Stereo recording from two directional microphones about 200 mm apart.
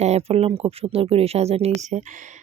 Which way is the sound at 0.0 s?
30° right (ahead or behind).